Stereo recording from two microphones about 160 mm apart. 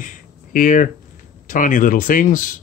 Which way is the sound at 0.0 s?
55° left (ahead or behind).